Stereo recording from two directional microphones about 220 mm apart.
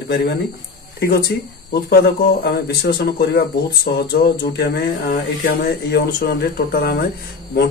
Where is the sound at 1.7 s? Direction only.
45° left (ahead or behind).